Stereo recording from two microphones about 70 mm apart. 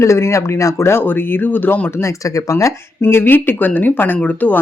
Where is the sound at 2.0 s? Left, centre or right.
Left.